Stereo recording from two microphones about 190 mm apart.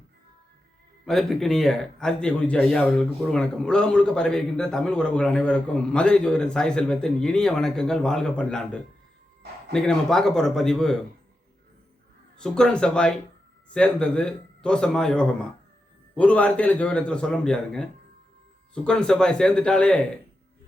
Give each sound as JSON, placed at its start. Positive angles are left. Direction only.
{"t": 1.0, "sound": "a man's voice", "side_deg": 0}
{"t": 12.4, "sound": "a man's voice", "side_deg": 5}